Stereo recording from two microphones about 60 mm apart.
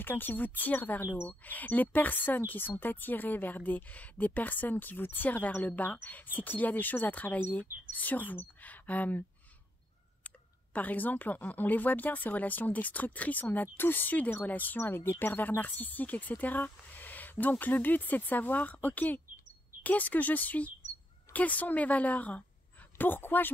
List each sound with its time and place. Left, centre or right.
0.0 s speech: left
1.4 s speech: left
10.2 s speech: left